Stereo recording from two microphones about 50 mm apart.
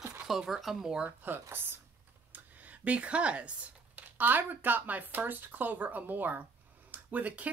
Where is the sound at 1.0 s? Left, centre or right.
Right.